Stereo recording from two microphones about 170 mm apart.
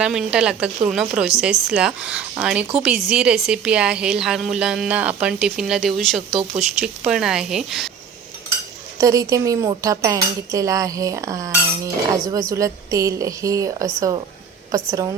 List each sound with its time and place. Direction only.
0.0 s a woman's voice: 5° right (ahead or behind)
9.0 s a woman's voice: 20° right (ahead or behind)